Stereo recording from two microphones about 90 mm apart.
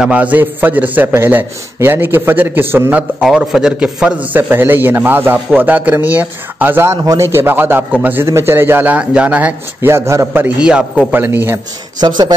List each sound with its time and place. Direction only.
0.0 s a man's voice: 15° right (ahead or behind)
3.0 s a man's voice: 10° right (ahead or behind)
9.8 s a man's voice: 30° right (ahead or behind)
10.4 s a man's voice: 10° right (ahead or behind)
12.0 s a man's voice: 50° right (ahead or behind)